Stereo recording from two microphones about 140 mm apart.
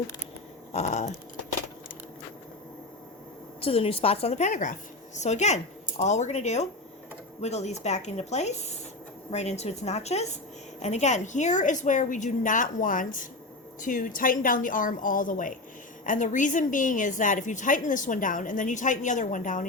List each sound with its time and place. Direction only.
0.7 s a woman's voice: 55° left (ahead or behind)
3.6 s a woman's voice: 40° left (ahead or behind); by 19.6 s 65° left (ahead or behind)